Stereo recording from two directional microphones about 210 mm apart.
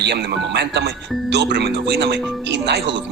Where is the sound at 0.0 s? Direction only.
55° right (ahead or behind).